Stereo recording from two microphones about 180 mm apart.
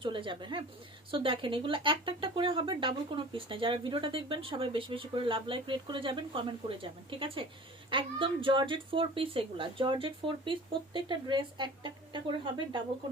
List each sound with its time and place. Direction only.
0.0 s speech: 30° right (ahead or behind)